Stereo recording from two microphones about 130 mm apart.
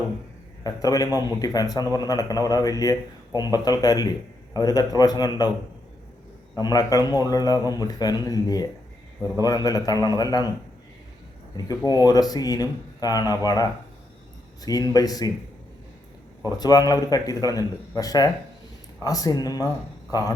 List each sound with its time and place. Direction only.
0.6 s a man's voice: 30° left (ahead or behind)
6.6 s a man's voice: 30° left (ahead or behind)
11.9 s a man's voice: 30° left (ahead or behind)
16.5 s a man's voice: 30° left (ahead or behind)